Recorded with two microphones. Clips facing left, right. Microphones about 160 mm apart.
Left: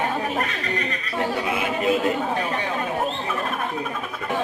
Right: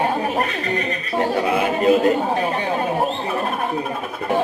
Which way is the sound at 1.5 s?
40° right (ahead or behind).